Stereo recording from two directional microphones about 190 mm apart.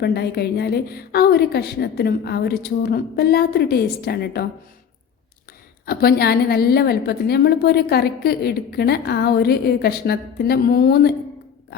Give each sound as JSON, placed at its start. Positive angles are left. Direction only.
{"t": 0.0, "sound": "a woman's voice", "side_deg": 55}
{"t": 5.8, "sound": "a woman's voice", "side_deg": 55}